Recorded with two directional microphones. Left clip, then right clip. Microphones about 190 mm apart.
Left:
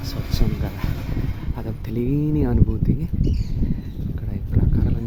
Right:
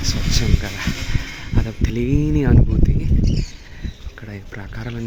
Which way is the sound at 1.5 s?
10° left (ahead or behind).